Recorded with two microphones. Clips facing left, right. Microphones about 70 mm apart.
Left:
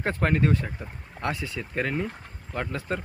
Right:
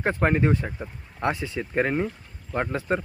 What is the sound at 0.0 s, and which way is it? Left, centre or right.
Speech, centre.